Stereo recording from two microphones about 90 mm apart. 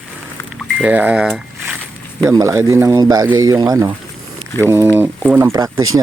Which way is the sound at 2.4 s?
35° right (ahead or behind).